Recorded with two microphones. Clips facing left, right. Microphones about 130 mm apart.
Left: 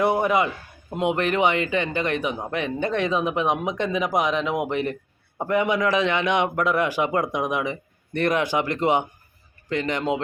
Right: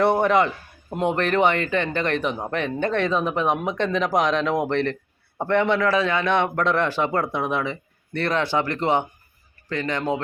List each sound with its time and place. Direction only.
0.0 s a man's voice: 10° left (ahead or behind)